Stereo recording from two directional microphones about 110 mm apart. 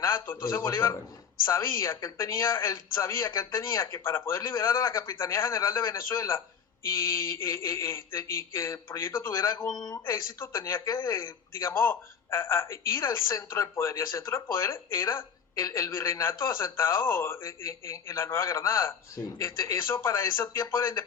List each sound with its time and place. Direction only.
0.0 s speech: 25° left (ahead or behind)
10.8 s speech: 40° left (ahead or behind)
11.5 s speech: 25° left (ahead or behind)